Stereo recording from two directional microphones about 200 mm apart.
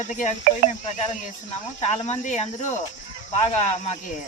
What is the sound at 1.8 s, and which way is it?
Speech, 35° left (ahead or behind).